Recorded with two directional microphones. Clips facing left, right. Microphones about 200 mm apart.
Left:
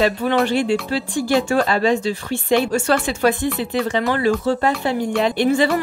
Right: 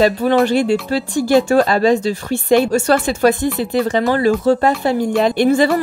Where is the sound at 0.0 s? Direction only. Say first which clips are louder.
Right 4 dB; 40° right (ahead or behind).